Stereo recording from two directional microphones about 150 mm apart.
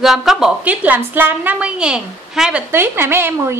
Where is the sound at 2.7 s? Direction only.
15° right (ahead or behind).